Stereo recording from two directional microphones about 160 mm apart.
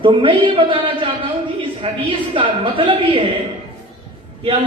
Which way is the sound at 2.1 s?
30° right (ahead or behind).